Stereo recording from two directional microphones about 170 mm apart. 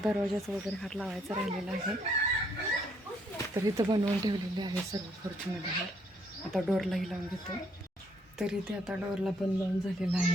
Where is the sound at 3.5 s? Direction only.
20° right (ahead or behind).